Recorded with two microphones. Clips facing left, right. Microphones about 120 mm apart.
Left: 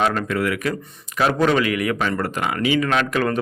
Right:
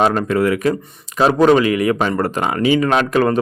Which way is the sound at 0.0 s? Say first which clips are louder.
Right 5 dB; 30° right (ahead or behind).